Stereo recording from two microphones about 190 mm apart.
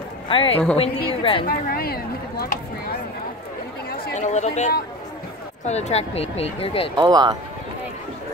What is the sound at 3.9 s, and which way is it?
Chatter, 50° left (ahead or behind).